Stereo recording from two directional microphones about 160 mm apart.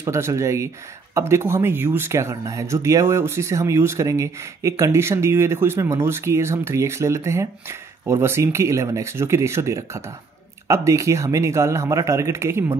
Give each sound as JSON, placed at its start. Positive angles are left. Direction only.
{"t": 0.0, "sound": "speech", "side_deg": -15}